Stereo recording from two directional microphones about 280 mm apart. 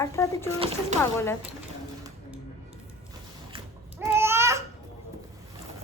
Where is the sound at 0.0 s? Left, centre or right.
Centre.